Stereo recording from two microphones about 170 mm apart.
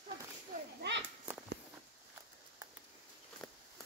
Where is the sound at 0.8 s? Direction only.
90° right.